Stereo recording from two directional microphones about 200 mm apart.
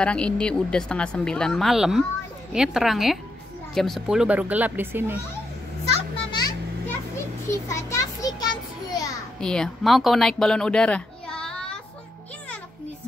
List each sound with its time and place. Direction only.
0.0 s speech: 5° left (ahead or behind)
5.9 s children playing: 20° left (ahead or behind)
7.6 s children playing: 15° left (ahead or behind)
9.4 s speech: 5° left (ahead or behind)